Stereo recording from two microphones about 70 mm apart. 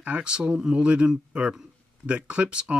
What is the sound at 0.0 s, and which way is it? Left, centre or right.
Speech, centre.